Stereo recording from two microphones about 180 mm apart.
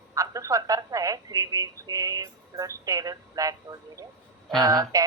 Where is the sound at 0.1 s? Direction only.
20° right (ahead or behind).